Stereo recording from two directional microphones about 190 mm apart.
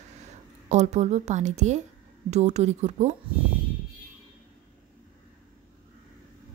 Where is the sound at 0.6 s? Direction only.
35° right (ahead or behind).